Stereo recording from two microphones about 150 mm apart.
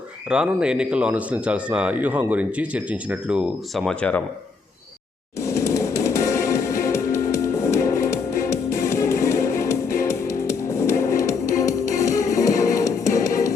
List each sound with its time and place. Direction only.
0.3 s speech: 5° right (ahead or behind)
5.4 s music: 20° left (ahead or behind)